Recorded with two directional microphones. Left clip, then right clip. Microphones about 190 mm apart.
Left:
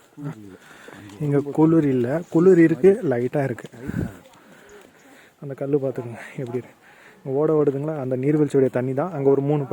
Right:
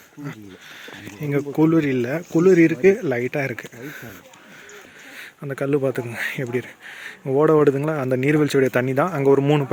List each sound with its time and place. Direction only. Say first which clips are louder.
1.2 s speech: left 1 dB; 35° left (ahead or behind)
5.4 s speech: right 2 dB; 5° right (ahead or behind)
7.3 s speech: right 4 dB; 5° right (ahead or behind)